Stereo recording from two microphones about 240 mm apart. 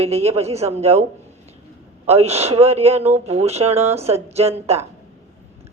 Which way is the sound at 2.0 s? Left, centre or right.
Right.